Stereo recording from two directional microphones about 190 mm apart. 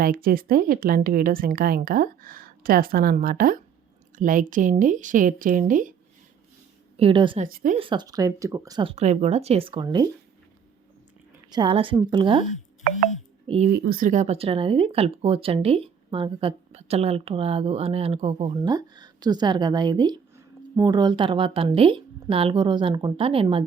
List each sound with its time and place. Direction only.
0.0 s speech: 50° right (ahead or behind)
6.9 s speech: 30° right (ahead or behind)
7.4 s speech: 45° right (ahead or behind)
7.8 s speech: 25° right (ahead or behind)
11.5 s speech: 25° right (ahead or behind)
13.7 s speech: 55° right (ahead or behind); by 23.6 s 30° right (ahead or behind)